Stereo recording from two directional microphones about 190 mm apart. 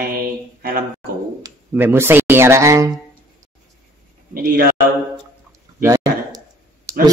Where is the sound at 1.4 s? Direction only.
10° right (ahead or behind).